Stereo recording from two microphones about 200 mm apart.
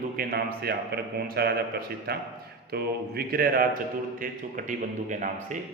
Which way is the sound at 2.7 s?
50° right (ahead or behind).